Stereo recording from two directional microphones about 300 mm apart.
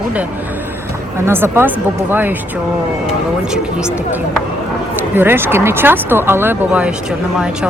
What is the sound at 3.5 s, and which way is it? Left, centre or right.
Speech, centre.